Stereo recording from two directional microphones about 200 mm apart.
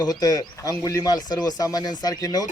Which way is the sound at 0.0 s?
20° left (ahead or behind).